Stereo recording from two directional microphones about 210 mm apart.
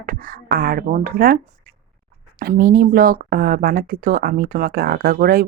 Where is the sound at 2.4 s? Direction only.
45° right (ahead or behind).